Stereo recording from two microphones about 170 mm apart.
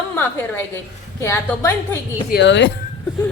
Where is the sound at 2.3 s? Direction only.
90° left.